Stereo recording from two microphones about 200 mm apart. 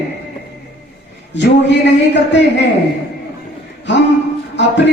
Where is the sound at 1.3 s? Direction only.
60° left (ahead or behind).